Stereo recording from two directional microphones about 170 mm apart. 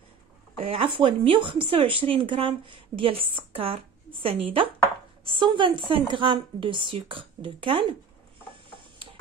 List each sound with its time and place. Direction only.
0.6 s a woman's voice: 35° right (ahead or behind)